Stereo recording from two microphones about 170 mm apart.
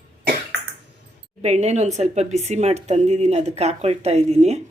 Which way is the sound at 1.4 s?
40° right (ahead or behind).